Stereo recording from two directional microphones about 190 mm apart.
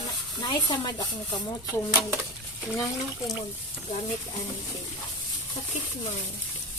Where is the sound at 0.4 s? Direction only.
20° left (ahead or behind).